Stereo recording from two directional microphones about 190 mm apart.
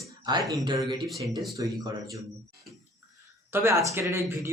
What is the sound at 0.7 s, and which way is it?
Speech, 25° right (ahead or behind).